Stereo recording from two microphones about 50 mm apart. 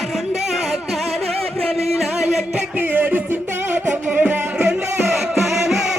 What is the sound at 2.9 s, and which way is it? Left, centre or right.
Music, right.